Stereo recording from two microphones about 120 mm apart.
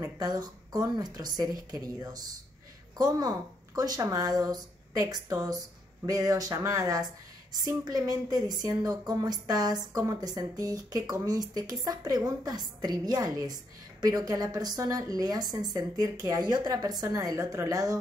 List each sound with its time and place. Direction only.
0.0 s a woman's voice: 35° right (ahead or behind)